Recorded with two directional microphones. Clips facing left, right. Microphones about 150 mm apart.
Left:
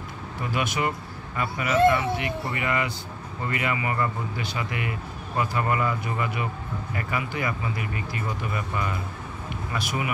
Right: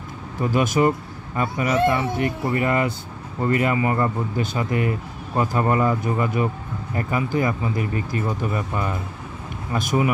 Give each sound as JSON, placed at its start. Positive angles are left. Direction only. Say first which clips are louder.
{"t": 0.4, "sound": "speech", "louder": "right 8 dB", "side_deg": -40}